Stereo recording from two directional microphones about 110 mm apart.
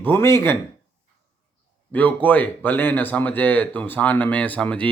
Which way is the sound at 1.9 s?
15° left (ahead or behind).